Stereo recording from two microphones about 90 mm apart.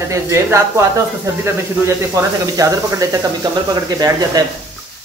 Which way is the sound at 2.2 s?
35° right (ahead or behind).